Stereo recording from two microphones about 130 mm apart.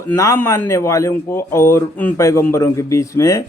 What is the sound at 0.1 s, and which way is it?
A man's voice, 20° left (ahead or behind).